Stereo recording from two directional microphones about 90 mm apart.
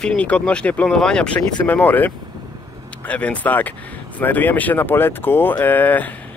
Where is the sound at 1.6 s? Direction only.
20° left (ahead or behind).